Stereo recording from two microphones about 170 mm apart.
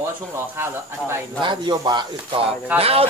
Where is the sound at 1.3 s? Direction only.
25° right (ahead or behind).